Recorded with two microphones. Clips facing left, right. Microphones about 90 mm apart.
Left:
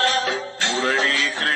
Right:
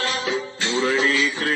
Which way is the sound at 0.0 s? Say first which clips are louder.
Left 3 dB; 50° left (ahead or behind).